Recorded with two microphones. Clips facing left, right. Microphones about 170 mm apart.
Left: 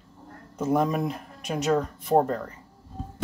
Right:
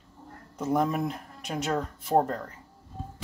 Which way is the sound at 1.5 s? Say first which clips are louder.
Left 5 dB; 5° left (ahead or behind).